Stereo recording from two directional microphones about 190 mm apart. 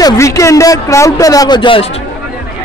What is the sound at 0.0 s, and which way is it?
A man's voice, 15° left (ahead or behind).